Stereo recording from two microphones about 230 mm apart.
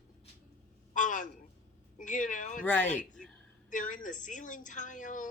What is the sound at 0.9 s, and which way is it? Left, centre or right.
A woman's voice, left.